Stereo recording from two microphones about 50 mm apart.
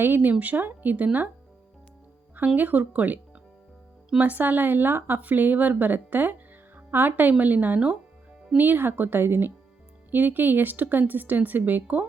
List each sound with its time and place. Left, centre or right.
0.0 s speech: right
2.6 s speech: right
4.2 s speech: right